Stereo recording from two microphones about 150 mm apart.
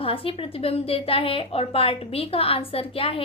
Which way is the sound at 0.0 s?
40° left (ahead or behind).